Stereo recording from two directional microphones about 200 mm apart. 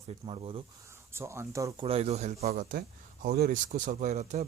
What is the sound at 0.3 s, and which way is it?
Speech, 25° right (ahead or behind).